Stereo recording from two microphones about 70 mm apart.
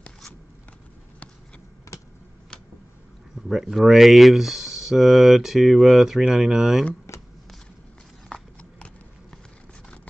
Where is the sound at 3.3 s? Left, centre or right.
Centre.